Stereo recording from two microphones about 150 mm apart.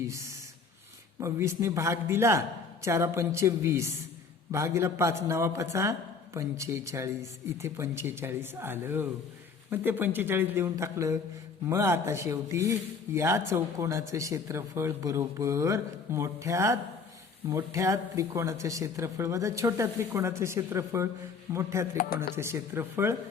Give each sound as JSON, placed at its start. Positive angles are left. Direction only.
{"t": 0.0, "sound": "speech", "side_deg": -20}